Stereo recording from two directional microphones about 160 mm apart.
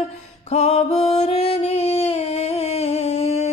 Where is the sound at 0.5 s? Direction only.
45° left (ahead or behind).